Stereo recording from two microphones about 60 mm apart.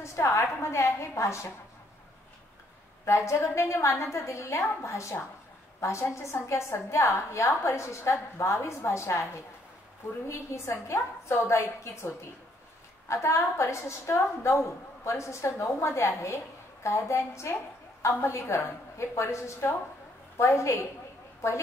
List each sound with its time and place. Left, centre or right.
0.0 s a woman's voice: left
3.1 s a woman's voice: left
10.2 s a woman's voice: left
13.1 s a woman's voice: left